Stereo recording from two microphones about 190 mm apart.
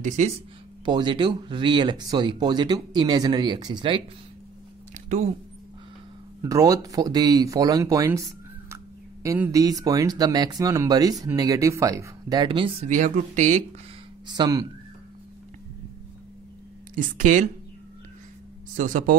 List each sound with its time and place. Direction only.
0.0 s speech: 40° right (ahead or behind)
0.8 s speech: 25° right (ahead or behind)
4.9 s a sound: 35° right (ahead or behind)
6.4 s speech: 20° right (ahead or behind); by 13.7 s 40° right (ahead or behind)
14.2 s speech: 20° right (ahead or behind)
16.9 s speech: 45° right (ahead or behind)
18.8 s speech: 45° right (ahead or behind)